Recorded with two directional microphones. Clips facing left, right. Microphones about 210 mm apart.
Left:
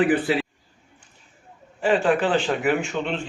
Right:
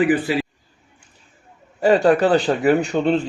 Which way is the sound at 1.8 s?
40° right (ahead or behind).